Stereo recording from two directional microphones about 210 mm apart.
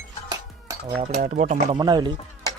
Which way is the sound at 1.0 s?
35° right (ahead or behind).